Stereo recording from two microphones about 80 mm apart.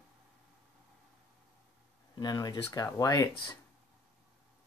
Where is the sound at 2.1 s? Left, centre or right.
Left.